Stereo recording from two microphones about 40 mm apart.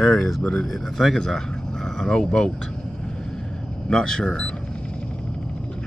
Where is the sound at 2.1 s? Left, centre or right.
Centre.